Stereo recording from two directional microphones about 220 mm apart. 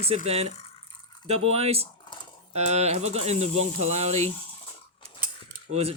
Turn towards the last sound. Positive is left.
turn(degrees=-80)